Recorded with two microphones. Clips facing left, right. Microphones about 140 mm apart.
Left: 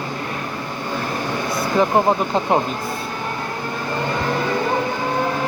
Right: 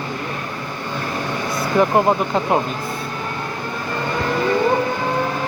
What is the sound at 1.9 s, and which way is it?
Speech, centre (ahead or behind).